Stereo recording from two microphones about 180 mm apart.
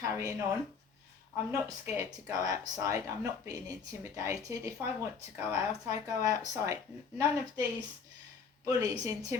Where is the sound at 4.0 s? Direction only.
15° right (ahead or behind).